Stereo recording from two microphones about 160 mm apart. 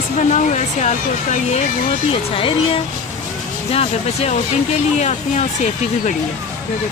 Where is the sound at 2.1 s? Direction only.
35° left (ahead or behind).